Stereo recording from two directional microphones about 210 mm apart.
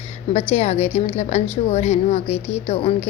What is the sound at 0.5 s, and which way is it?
A woman's voice, 30° left (ahead or behind).